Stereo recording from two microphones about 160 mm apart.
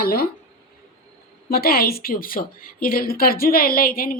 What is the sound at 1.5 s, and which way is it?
A woman's voice, 75° left (ahead or behind).